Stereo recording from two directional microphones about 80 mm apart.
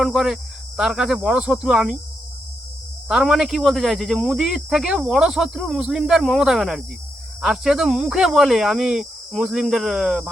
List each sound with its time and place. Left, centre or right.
0.0 s speech: centre
3.1 s speech: centre